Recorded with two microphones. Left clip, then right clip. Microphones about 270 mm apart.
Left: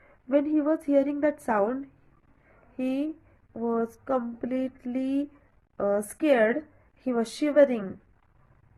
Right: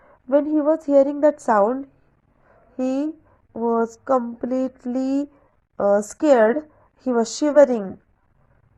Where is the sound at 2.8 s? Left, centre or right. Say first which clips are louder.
Right 6 dB; centre.